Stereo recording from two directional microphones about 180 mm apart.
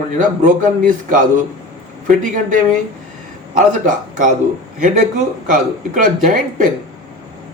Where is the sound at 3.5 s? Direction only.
45° right (ahead or behind).